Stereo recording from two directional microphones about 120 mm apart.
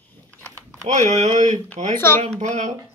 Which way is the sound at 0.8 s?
85° right.